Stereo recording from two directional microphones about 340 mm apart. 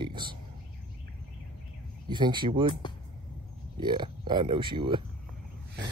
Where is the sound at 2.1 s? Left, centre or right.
Centre.